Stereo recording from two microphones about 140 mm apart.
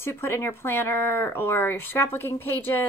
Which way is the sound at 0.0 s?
20° left (ahead or behind).